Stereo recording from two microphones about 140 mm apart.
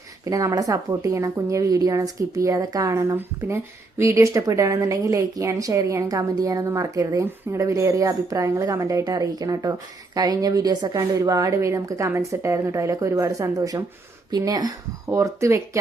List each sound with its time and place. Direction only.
0.3 s a woman's voice: 25° right (ahead or behind)